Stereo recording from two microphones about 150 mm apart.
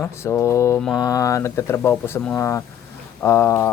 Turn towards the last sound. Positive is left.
turn(degrees=15)  # may be behind; listen again after turning